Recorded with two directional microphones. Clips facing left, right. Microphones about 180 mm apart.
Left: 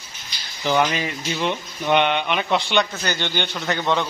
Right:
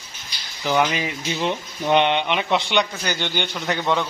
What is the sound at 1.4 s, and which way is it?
A man's voice, 30° right (ahead or behind).